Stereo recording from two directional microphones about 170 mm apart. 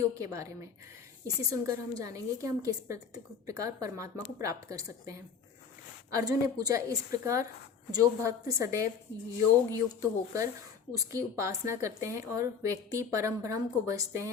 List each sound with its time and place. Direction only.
0.2 s a woman's voice: 20° right (ahead or behind)